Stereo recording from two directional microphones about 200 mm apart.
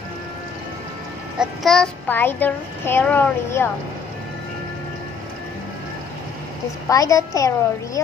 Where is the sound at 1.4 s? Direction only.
Centre (ahead or behind).